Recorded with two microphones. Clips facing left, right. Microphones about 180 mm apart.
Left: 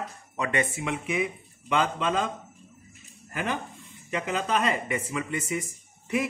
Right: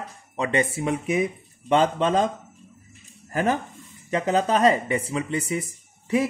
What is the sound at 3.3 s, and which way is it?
Speech, 40° right (ahead or behind).